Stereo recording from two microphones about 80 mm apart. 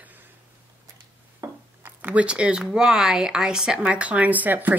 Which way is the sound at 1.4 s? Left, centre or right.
Right.